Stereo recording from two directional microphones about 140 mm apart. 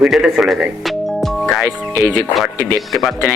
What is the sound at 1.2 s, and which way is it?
Music, centre (ahead or behind).